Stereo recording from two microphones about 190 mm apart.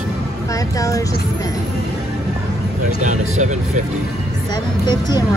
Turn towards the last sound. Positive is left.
turn(degrees=20)  # may be behind; listen again after turning